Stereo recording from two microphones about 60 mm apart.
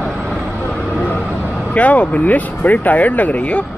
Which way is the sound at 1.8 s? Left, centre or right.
Left.